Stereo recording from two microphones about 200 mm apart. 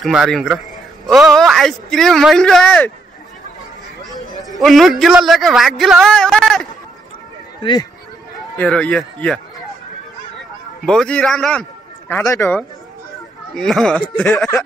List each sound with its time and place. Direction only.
0.0 s speech: centre (ahead or behind)
4.6 s speech: centre (ahead or behind)
8.5 s speech: 5° left (ahead or behind)
10.9 s speech: 5° left (ahead or behind)